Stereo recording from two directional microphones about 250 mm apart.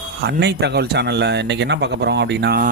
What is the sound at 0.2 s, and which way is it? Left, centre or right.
Speech, right.